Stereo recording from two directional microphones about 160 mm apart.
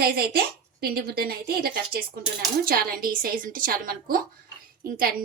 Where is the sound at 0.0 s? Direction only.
70° right (ahead or behind).